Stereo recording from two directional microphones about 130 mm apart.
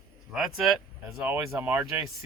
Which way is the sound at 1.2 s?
15° right (ahead or behind).